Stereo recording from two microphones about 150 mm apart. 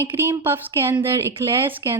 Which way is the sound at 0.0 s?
15° right (ahead or behind).